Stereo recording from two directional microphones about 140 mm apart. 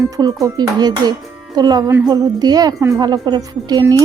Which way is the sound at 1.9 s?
15° right (ahead or behind).